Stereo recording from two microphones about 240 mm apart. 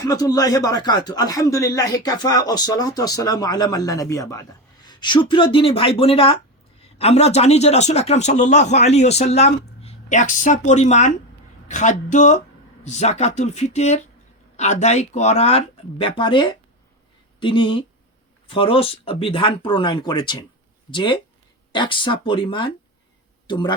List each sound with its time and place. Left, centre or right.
0.0 s a man's voice: centre